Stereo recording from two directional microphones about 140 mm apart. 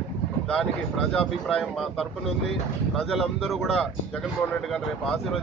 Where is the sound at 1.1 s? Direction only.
5° left (ahead or behind).